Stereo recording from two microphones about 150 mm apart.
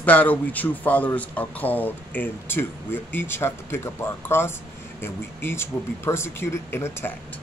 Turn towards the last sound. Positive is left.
turn(degrees=15)  # may be behind; listen again after turning